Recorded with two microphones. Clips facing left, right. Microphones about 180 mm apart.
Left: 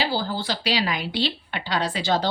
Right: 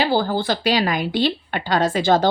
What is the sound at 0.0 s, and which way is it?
A woman's voice, 55° right (ahead or behind).